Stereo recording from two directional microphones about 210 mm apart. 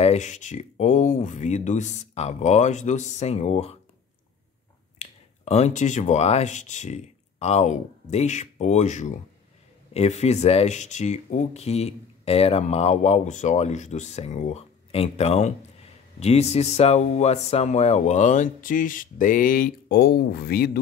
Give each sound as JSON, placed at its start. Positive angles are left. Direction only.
{"t": 0.0, "sound": "speech", "side_deg": 35}
{"t": 4.9, "sound": "speech", "side_deg": 30}